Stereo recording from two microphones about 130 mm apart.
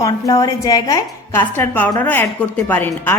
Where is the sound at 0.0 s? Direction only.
25° left (ahead or behind).